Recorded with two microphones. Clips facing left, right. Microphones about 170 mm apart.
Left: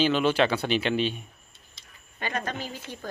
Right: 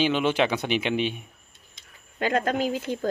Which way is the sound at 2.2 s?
90° right.